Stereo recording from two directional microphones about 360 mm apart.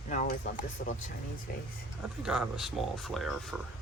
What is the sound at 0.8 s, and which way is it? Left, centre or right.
Speech, left.